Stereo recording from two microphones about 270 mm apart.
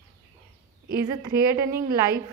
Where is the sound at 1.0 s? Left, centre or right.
Centre.